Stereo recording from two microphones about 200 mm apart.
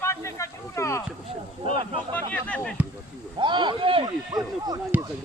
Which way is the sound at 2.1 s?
5° left (ahead or behind).